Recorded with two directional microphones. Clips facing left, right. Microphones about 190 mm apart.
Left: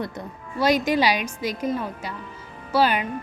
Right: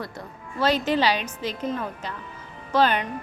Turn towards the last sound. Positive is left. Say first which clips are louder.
# even
turn(degrees=10)  # may be behind; listen again after turning